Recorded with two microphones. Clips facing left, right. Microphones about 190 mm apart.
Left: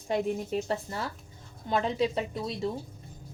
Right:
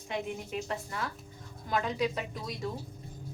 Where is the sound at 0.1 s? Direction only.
35° left (ahead or behind).